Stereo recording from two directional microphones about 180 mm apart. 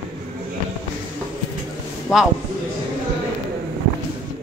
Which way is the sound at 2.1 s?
Centre (ahead or behind).